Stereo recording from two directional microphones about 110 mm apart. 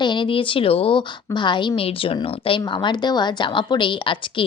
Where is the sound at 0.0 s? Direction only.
45° left (ahead or behind).